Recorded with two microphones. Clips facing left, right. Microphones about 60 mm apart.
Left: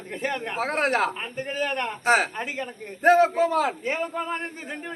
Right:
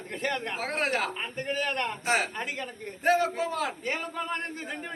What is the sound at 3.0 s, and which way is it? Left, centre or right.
Speech, left.